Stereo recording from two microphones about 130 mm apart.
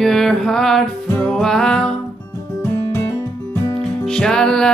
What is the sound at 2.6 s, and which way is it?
Music, 20° left (ahead or behind).